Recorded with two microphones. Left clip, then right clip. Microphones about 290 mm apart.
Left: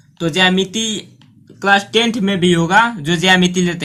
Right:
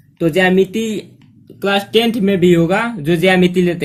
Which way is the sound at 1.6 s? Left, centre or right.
Centre.